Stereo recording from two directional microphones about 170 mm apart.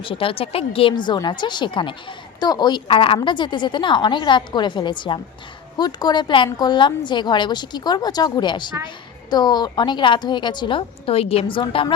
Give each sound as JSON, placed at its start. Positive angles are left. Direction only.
{"t": 0.0, "sound": "a woman's voice", "side_deg": 30}